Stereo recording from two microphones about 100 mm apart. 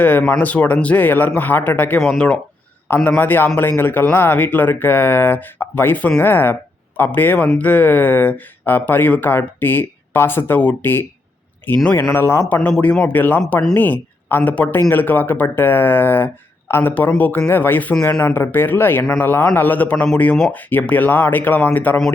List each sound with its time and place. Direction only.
0.0 s speech: 15° left (ahead or behind)
3.2 s speech: 20° left (ahead or behind)
12.6 s speech: 10° left (ahead or behind)